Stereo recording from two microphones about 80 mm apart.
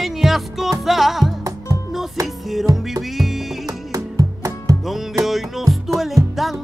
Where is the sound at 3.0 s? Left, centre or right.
Centre.